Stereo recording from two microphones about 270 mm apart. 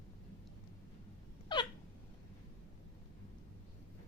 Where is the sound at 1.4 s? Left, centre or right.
Centre.